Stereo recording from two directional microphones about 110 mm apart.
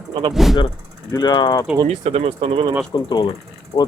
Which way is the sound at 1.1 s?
40° left (ahead or behind).